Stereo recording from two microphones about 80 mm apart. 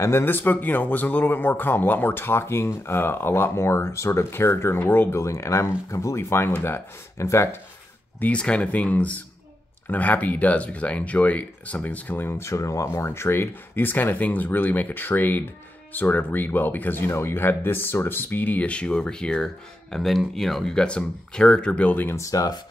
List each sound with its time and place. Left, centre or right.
0.0 s speech: left
5.2 s speech: left
8.2 s speech: centre
22.0 s speech: left